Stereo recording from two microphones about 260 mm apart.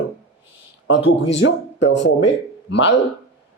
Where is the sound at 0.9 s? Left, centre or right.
Left.